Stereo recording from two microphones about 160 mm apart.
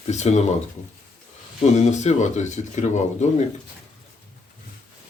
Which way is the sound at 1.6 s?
45° left (ahead or behind).